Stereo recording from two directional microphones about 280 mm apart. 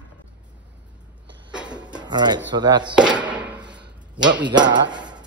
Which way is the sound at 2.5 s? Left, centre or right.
Centre.